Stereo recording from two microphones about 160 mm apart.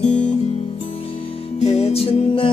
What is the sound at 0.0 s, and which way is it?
Music, 45° left (ahead or behind).